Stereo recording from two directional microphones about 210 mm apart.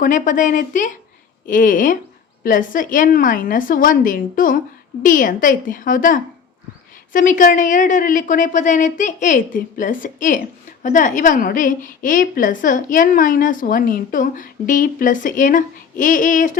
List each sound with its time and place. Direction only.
0.0 s a woman's voice: 40° left (ahead or behind)